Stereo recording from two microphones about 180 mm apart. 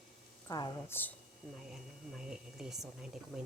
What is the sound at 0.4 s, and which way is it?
Speech, 20° left (ahead or behind).